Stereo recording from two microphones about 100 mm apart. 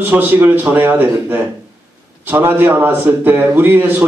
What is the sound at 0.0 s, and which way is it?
A man's voice, 20° right (ahead or behind).